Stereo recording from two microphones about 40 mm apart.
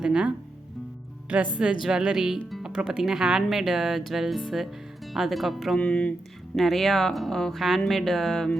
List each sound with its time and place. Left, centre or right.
0.0 s speech: right
1.3 s a woman's voice: right
1.8 s speech: centre
5.8 s speech: left
6.6 s speech: centre